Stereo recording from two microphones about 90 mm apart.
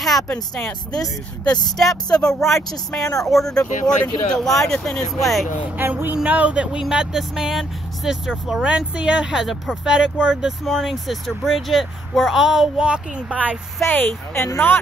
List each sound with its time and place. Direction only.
0.0 s speech: 5° left (ahead or behind)
1.8 s speech: 5° left (ahead or behind)
5.8 s speech: 20° right (ahead or behind)
13.8 s speech: 20° left (ahead or behind)
14.3 s speech: 30° left (ahead or behind)